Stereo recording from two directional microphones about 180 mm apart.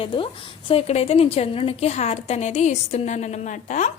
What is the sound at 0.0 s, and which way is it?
A woman's voice, 30° left (ahead or behind).